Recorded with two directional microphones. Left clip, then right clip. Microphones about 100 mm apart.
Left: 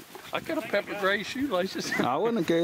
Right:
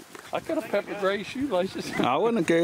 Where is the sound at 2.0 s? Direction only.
Centre (ahead or behind).